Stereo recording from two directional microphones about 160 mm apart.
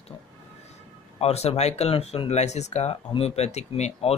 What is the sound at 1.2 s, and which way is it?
Speech, 40° left (ahead or behind).